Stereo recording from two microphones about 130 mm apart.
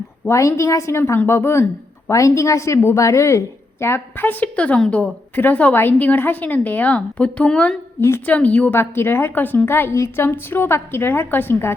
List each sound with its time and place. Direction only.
0.3 s a woman's voice: 25° left (ahead or behind)